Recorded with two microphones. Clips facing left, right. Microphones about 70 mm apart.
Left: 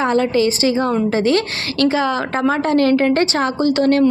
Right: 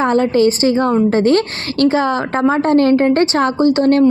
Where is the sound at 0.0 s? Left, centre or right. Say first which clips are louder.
Right 3 dB; right.